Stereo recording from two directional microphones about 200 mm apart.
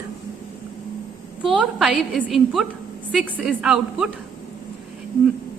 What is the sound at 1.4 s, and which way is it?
A woman's voice, 5° right (ahead or behind).